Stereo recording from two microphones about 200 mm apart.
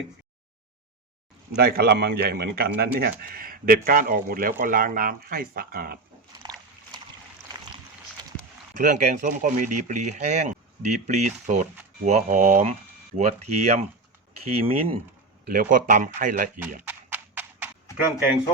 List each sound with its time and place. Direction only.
1.5 s speech: 50° right (ahead or behind)
6.4 s dog: 20° right (ahead or behind)
8.7 s speech: 40° right (ahead or behind)
15.4 s speech: 45° right (ahead or behind)
16.8 s clip-clop: 10° right (ahead or behind)